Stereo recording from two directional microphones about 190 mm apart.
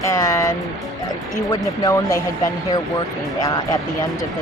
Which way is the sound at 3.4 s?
20° left (ahead or behind).